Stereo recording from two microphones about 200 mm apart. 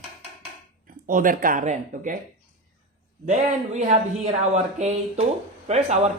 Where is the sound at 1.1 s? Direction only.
45° right (ahead or behind).